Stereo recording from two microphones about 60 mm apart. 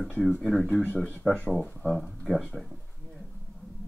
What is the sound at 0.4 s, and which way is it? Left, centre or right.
Speech, centre.